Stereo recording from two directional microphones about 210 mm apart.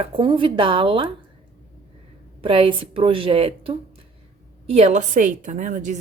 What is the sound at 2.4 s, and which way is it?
A woman's voice, 25° right (ahead or behind).